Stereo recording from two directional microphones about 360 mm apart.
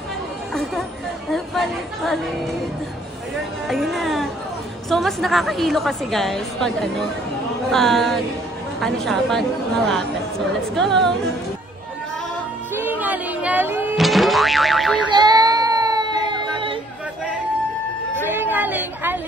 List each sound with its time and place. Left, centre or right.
0.5 s chatter: centre
1.3 s a woman's voice: centre
3.6 s a woman's voice: centre
12.7 s boing: centre
15.0 s a sound: centre
18.2 s a sound: centre